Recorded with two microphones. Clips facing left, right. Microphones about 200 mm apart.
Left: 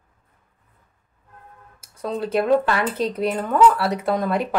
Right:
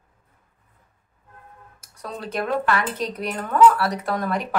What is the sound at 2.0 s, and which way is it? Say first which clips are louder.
Speech: left 6 dB; 30° left (ahead or behind).